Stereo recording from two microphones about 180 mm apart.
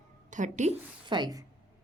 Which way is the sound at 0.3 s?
45° right (ahead or behind).